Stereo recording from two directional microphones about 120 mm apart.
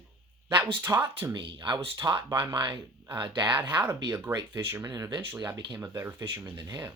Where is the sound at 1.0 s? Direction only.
35° right (ahead or behind).